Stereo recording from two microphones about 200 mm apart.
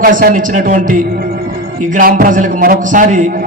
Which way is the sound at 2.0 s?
45° right (ahead or behind).